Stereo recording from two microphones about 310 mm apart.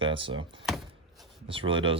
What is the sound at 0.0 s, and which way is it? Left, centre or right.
Speech, centre.